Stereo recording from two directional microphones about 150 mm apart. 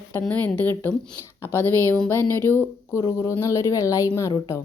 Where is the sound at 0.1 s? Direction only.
10° left (ahead or behind).